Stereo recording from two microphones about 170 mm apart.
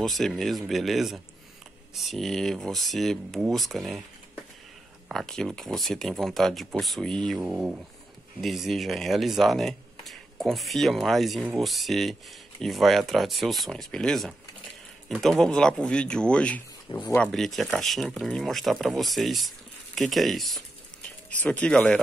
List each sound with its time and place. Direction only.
0.0 s speech: centre (ahead or behind)
5.0 s speech: centre (ahead or behind)
16.9 s speech: 20° left (ahead or behind)
17.2 s speech: centre (ahead or behind)